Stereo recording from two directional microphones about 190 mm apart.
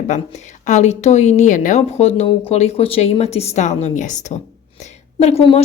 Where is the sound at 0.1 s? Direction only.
40° left (ahead or behind).